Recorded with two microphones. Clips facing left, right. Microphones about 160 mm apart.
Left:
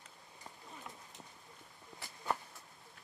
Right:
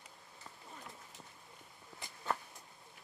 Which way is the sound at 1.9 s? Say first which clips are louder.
Even; 20° left (ahead or behind).